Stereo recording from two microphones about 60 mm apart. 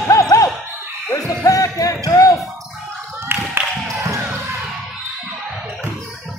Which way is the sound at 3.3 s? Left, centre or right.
Right.